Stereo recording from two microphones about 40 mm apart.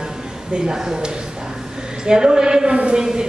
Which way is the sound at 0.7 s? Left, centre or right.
Centre.